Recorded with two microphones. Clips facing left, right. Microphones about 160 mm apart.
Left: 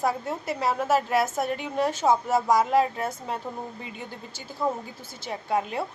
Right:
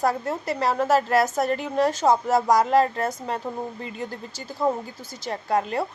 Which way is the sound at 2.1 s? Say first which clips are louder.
Even; 40° right (ahead or behind).